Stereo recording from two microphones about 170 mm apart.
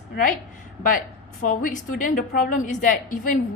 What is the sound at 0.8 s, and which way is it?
A woman's voice, 50° left (ahead or behind).